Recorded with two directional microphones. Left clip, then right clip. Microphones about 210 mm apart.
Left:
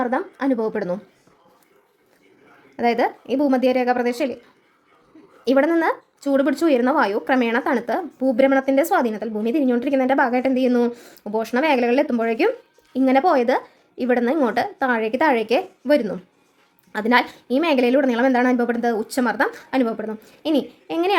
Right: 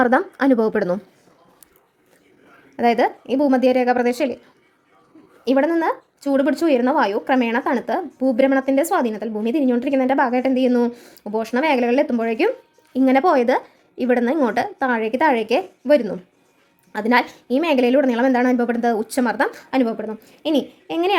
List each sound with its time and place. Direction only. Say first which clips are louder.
0.0 s a woman's voice: right 6 dB; 20° right (ahead or behind)
2.7 s a woman's voice: right 2 dB; 15° right (ahead or behind)
5.5 s speech: even; centre (ahead or behind)